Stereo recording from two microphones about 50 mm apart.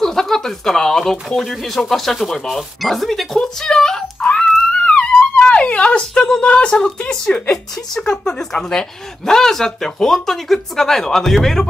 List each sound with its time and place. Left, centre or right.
0.0 s a sound: centre
1.3 s speech: centre
3.3 s speech: centre
4.3 s wail: centre
6.4 s speech: centre